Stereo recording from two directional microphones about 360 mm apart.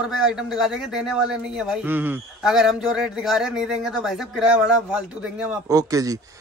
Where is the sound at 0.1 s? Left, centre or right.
Centre.